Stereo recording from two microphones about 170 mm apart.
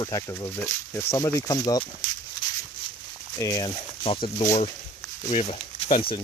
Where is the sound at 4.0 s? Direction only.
30° left (ahead or behind).